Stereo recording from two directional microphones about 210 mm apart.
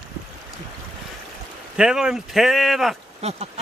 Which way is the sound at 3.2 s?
30° right (ahead or behind).